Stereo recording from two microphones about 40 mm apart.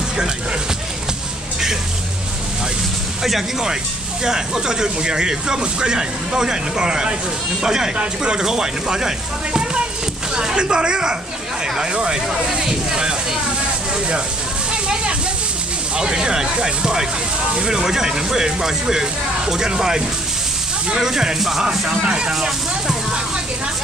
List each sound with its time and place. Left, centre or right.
3.3 s speech: centre
4.2 s a woman's voice: centre
14.7 s a sound: right
16.0 s speech: centre
21.6 s a woman's voice: right
22.3 s speech: centre